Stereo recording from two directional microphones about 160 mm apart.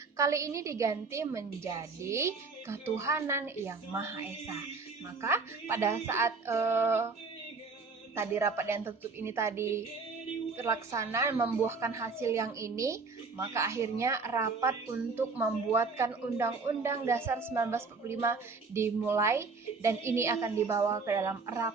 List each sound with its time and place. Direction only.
0.2 s a woman's voice: 20° right (ahead or behind)
8.1 s a woman's voice: 15° right (ahead or behind)